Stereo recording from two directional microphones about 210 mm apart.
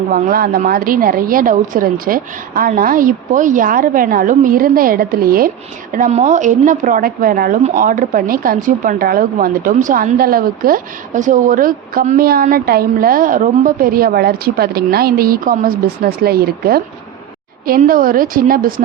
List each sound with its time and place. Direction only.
0.1 s a woman's voice: 40° right (ahead or behind)